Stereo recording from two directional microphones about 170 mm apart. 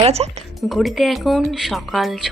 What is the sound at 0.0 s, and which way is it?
Speech, 35° right (ahead or behind).